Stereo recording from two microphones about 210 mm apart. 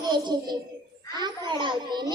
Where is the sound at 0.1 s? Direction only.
20° right (ahead or behind).